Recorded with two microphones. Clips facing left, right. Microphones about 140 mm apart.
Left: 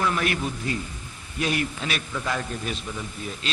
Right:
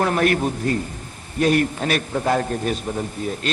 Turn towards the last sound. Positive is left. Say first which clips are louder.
# right 8 dB
turn(degrees=-50)  # may be behind; listen again after turning